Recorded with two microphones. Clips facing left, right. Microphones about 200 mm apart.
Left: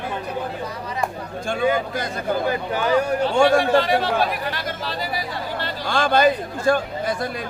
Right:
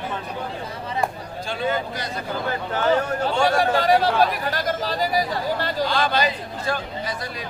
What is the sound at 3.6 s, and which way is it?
Speech, 40° right (ahead or behind).